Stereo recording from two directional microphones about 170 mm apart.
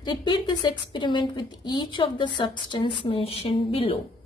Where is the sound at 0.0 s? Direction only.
25° left (ahead or behind).